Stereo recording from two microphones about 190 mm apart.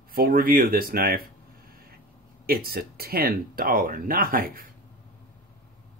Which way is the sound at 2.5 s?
50° right (ahead or behind).